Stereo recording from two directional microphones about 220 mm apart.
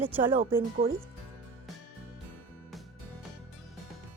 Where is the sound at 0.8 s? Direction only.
40° right (ahead or behind).